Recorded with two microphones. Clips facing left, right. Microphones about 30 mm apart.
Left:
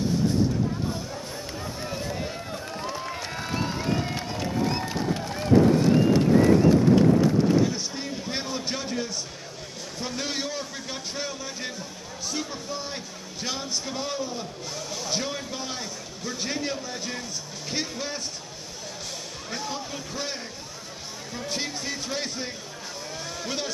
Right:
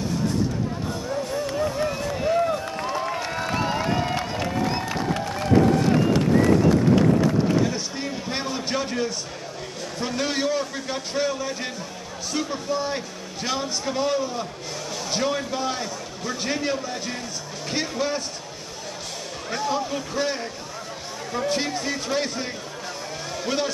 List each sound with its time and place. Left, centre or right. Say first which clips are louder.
1.3 s a sound: right 9 dB; centre
2.0 s run: right 9 dB; centre
2.4 s a sound: right 8 dB; right
2.9 s crowd: right 8 dB; centre
4.6 s music: right 2 dB; centre
4.9 s music: right 3 dB; right
7.6 s a sound: right 2 dB; centre
9.9 s speech: right 5 dB; centre
19.5 s speech: right 8 dB; centre